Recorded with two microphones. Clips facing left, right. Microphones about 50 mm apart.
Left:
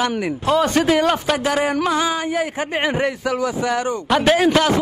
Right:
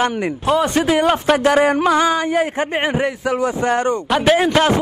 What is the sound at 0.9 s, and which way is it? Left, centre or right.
Speech, centre.